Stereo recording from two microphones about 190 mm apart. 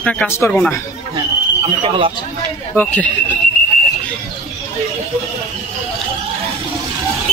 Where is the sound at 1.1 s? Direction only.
30° right (ahead or behind).